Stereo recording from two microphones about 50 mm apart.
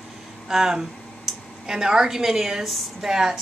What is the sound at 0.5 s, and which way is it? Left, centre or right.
A woman's voice, centre.